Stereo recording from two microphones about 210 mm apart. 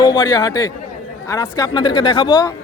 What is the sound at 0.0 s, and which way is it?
A man's voice, 20° left (ahead or behind).